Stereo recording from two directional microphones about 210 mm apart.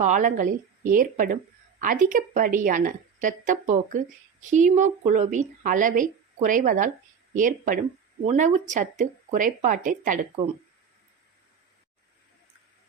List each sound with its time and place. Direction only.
0.0 s speech: 35° right (ahead or behind)